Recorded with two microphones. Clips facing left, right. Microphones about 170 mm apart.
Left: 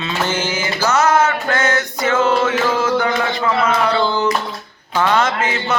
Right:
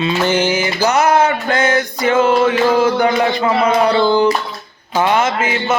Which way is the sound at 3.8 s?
35° right (ahead or behind).